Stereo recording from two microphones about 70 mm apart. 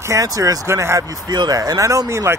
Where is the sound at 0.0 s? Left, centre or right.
Right.